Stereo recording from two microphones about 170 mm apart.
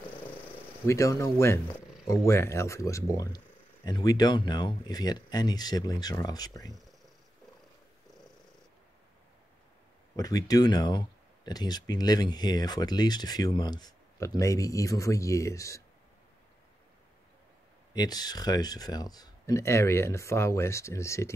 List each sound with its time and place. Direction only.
0.8 s speech: 20° left (ahead or behind)
10.1 s speech: 20° left (ahead or behind)
17.9 s speech: 25° left (ahead or behind)